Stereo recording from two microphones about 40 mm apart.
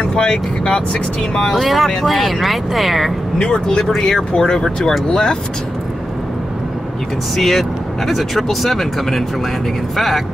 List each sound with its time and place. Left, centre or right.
0.0 s speech: left
1.5 s speech: centre
3.3 s speech: left
7.3 s speech: centre